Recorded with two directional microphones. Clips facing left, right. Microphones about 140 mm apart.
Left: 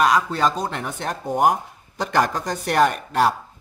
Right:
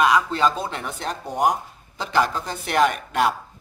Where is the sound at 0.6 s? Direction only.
50° left (ahead or behind).